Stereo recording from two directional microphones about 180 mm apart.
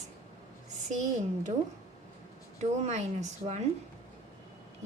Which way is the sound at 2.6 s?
40° right (ahead or behind).